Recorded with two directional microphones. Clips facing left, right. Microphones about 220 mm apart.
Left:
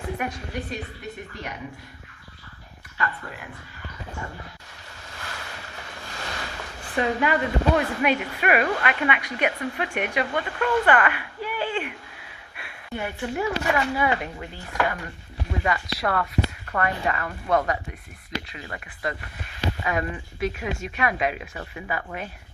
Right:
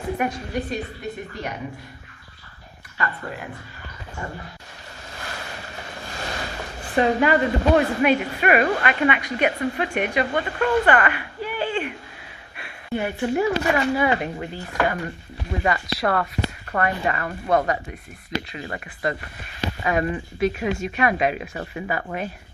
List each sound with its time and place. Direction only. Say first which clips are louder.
0.2 s speech: right 5 dB; 40° right (ahead or behind)
3.0 s speech: right 2 dB; 40° right (ahead or behind)
6.1 s speech: right 4 dB; 30° right (ahead or behind)
12.5 s a sound: right 6 dB; 45° right (ahead or behind)
13.2 s speech: right 4 dB; 40° right (ahead or behind)